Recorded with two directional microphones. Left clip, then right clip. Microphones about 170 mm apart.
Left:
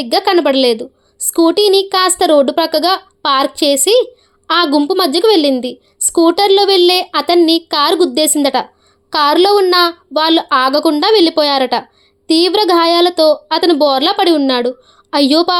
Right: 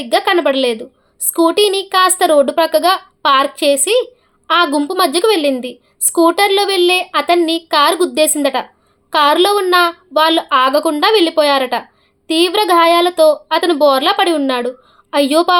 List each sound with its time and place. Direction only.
0.0 s a child's voice: 40° left (ahead or behind)